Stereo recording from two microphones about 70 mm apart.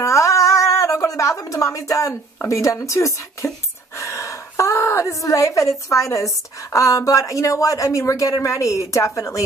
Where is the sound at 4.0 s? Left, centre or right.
Left.